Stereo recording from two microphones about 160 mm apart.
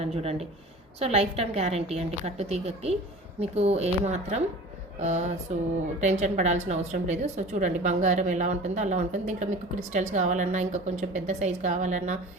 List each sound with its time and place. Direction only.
0.0 s a woman's voice: 40° right (ahead or behind)